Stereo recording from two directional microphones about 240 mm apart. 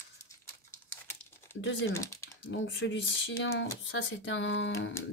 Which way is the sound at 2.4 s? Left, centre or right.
Left.